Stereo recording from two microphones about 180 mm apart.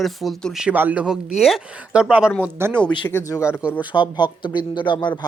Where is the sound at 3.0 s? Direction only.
10° left (ahead or behind).